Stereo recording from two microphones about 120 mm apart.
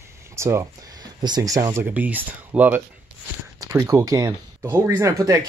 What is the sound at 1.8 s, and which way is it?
Speech, 15° right (ahead or behind).